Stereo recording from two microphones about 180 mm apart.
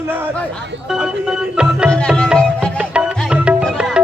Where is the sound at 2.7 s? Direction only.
5° right (ahead or behind).